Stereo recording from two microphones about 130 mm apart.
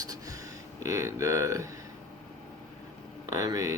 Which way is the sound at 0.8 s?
25° right (ahead or behind).